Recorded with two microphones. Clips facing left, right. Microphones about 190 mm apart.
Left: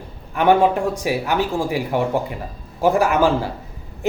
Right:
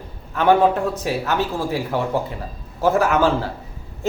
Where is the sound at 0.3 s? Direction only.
15° left (ahead or behind).